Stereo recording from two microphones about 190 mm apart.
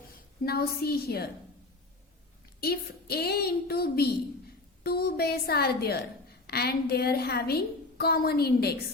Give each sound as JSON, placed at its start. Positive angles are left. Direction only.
{"t": 0.4, "sound": "a woman's voice", "side_deg": 55}
{"t": 2.6, "sound": "a woman's voice", "side_deg": 55}